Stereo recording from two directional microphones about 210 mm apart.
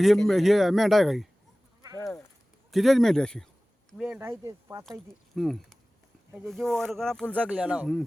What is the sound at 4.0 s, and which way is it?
Speech, 5° right (ahead or behind).